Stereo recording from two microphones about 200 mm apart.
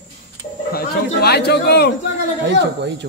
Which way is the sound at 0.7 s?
55° left (ahead or behind).